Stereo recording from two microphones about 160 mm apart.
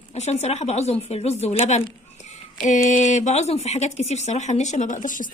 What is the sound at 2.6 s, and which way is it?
Speech, 50° left (ahead or behind).